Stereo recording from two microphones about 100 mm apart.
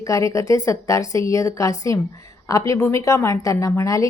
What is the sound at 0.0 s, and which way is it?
A woman's voice, 30° left (ahead or behind).